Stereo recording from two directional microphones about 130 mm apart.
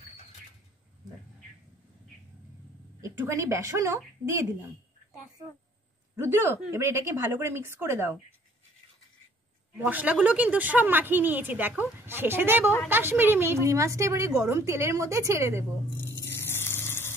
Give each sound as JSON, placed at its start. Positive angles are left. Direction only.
{"t": 3.0, "sound": "a woman's voice", "side_deg": -25}
{"t": 6.1, "sound": "a woman's voice", "side_deg": -20}
{"t": 9.8, "sound": "a woman's voice", "side_deg": -15}
{"t": 16.0, "sound": "music", "side_deg": 20}